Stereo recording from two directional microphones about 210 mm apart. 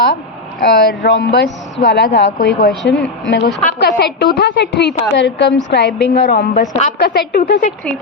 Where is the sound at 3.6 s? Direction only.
30° left (ahead or behind).